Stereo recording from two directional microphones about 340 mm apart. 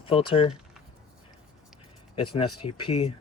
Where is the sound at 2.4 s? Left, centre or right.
Left.